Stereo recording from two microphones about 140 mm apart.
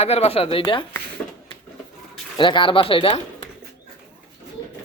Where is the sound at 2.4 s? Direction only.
35° left (ahead or behind).